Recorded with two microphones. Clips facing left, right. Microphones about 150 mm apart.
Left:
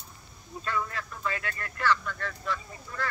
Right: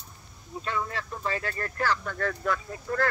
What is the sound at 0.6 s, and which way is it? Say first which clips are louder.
Speech: right 1 dB; 25° right (ahead or behind).